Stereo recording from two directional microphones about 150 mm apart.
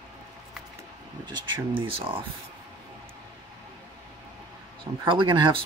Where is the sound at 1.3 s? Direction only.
35° right (ahead or behind).